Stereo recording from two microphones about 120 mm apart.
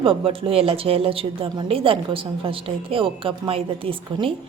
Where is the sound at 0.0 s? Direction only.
50° right (ahead or behind).